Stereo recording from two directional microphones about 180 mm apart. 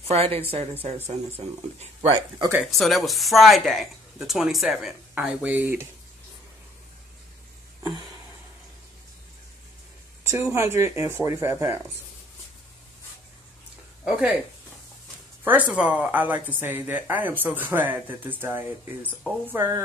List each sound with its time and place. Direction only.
0.1 s speech: 35° right (ahead or behind)
2.6 s speech: centre (ahead or behind)
10.2 s speech: 15° right (ahead or behind)
15.4 s speech: 10° right (ahead or behind)